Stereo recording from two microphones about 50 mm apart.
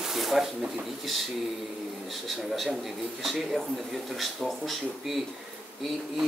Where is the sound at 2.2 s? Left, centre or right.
Centre.